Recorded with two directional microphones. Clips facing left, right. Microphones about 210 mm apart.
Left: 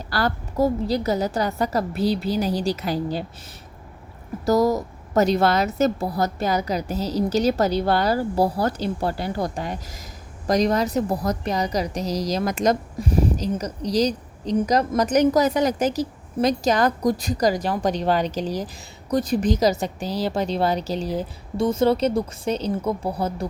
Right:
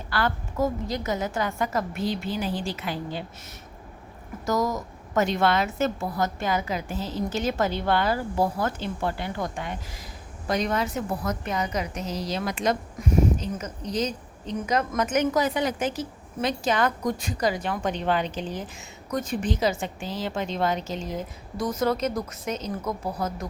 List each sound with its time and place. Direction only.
0.1 s a woman's voice: 40° left (ahead or behind)
4.4 s a woman's voice: 35° left (ahead or behind)